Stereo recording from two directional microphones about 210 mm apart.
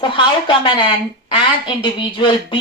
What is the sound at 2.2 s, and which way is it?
Speech, 25° left (ahead or behind).